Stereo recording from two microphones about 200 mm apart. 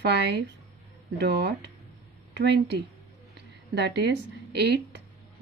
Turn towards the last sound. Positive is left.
turn(degrees=-55)  # may be behind; listen again after turning